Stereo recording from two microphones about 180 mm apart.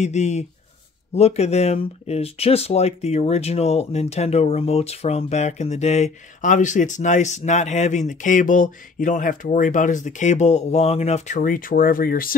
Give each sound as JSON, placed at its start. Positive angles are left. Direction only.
{"t": 0.0, "sound": "speech", "side_deg": 40}